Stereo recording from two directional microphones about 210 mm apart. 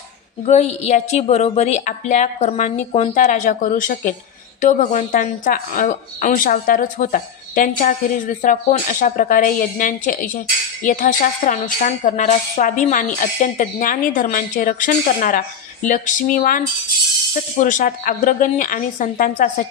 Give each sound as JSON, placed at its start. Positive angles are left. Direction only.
{"t": 0.5, "sound": "a woman's voice", "side_deg": 30}